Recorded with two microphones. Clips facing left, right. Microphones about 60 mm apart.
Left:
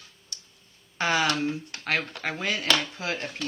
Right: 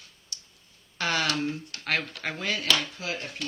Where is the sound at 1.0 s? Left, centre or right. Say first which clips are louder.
Left 3 dB; left.